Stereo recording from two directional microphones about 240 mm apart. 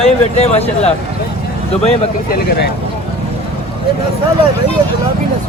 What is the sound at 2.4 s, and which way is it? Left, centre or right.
Speech, left.